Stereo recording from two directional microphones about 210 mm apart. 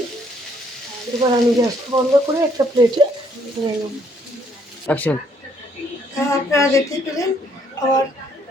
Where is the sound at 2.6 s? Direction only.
15° right (ahead or behind).